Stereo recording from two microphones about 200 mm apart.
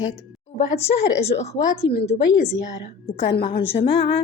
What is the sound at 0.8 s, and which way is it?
A woman's voice, 30° left (ahead or behind).